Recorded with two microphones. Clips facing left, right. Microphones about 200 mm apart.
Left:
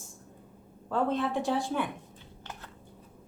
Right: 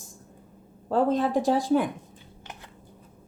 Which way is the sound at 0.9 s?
40° right (ahead or behind).